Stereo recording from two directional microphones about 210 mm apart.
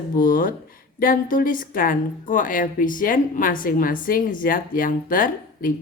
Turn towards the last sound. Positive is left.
turn(degrees=40)  # may be behind; listen again after turning